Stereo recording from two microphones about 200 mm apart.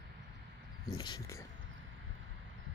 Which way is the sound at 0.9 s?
20° left (ahead or behind).